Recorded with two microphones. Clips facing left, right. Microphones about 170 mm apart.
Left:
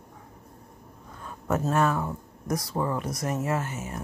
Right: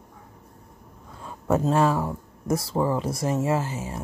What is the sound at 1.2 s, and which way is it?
Speech, 30° right (ahead or behind).